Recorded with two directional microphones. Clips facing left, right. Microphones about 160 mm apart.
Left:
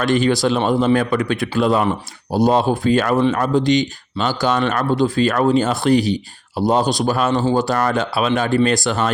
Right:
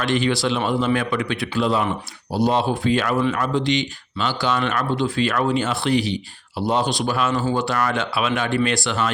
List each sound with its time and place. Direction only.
0.0 s speech: 45° left (ahead or behind)